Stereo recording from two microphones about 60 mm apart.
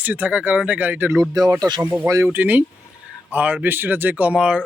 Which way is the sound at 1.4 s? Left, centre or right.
Right.